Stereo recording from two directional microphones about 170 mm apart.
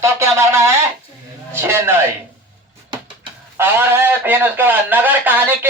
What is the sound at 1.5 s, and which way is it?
Speech, 15° right (ahead or behind).